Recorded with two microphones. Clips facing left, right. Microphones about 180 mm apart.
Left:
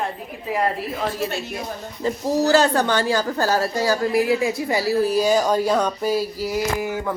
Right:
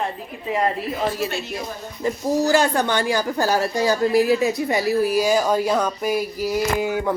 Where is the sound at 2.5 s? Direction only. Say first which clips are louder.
Left 3 dB; 15° right (ahead or behind).